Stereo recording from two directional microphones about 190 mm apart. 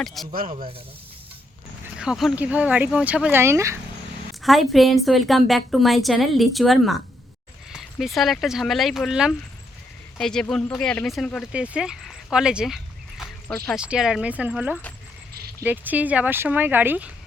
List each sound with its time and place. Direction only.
0.0 s a woman's voice: centre (ahead or behind)
0.3 s speech: 45° right (ahead or behind)
2.0 s speech: 5° right (ahead or behind)
4.4 s a woman's voice: centre (ahead or behind)